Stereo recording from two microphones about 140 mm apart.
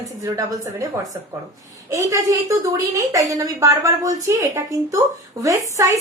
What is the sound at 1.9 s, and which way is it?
A woman's voice, 25° right (ahead or behind).